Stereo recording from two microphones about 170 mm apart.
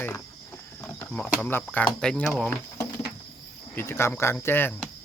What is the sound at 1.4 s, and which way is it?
Insect, 10° left (ahead or behind).